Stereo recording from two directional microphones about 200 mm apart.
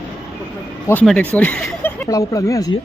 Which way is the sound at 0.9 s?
5° left (ahead or behind).